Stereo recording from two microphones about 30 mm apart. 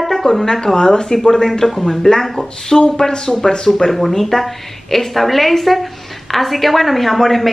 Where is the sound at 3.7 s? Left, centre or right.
Centre.